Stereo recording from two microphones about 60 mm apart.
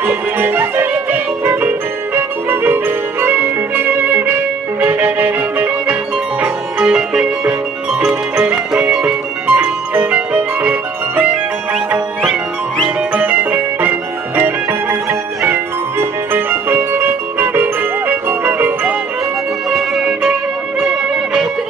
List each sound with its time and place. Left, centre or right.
0.0 s music: right
6.4 s music: centre
13.1 s music: right
15.4 s music: right
20.8 s music: centre